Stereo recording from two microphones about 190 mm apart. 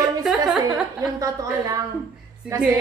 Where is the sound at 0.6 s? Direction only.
20° right (ahead or behind).